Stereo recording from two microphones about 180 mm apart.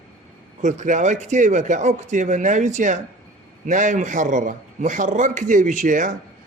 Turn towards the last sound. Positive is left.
turn(degrees=-45)  # may be behind; listen again after turning